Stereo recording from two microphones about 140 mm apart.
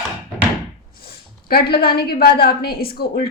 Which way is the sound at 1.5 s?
90° left.